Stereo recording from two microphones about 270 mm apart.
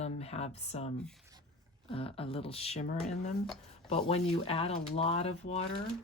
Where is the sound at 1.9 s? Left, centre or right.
Left.